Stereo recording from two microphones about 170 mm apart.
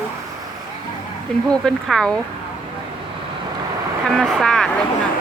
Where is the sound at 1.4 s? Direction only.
5° left (ahead or behind).